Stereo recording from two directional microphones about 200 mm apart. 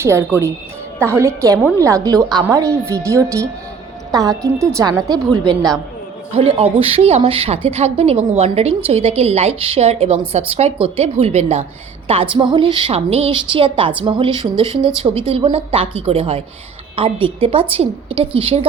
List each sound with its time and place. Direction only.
0.0 s a woman's voice: 15° right (ahead or behind)
6.3 s a woman's voice: 30° right (ahead or behind)